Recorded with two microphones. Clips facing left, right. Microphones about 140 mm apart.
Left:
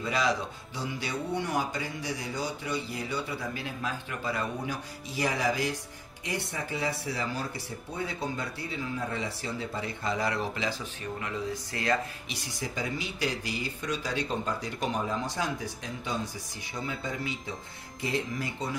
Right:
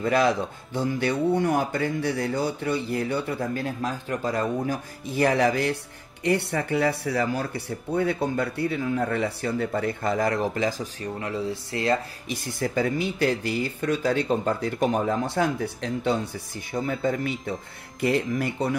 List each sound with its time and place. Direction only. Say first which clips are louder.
0.0 s speech: right 7 dB; 55° right (ahead or behind); by 12.0 s 30° right (ahead or behind)
12.3 s speech: right 8 dB; 55° right (ahead or behind)